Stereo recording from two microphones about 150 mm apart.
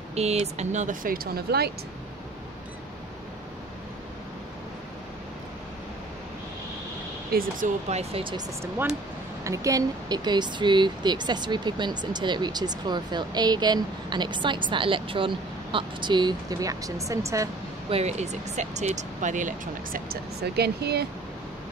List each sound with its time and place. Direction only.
0.1 s speech: 45° right (ahead or behind); by 1.7 s 90° right
7.3 s speech: 65° right (ahead or behind)
7.9 s speech: 40° right (ahead or behind)
9.4 s speech: 20° right (ahead or behind)
17.8 s speech: 45° right (ahead or behind); by 21.1 s 90° right